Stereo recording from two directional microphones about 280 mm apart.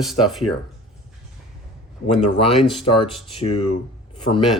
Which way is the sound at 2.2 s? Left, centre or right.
Left.